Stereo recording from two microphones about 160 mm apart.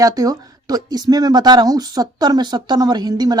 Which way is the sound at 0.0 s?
20° right (ahead or behind).